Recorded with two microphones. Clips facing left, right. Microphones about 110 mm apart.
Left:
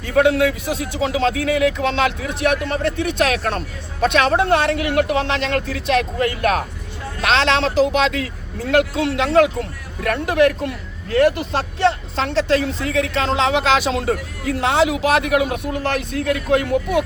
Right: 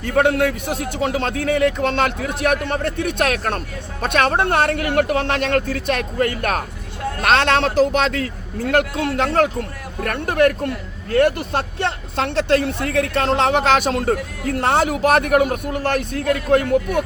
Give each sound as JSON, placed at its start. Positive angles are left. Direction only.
{"t": 0.0, "sound": "speech", "side_deg": -50}